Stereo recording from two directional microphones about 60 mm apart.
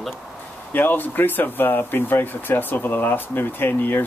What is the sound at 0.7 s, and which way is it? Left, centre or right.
Speech, left.